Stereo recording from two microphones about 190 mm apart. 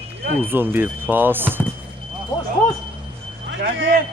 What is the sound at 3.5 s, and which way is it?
Speech, 65° right (ahead or behind).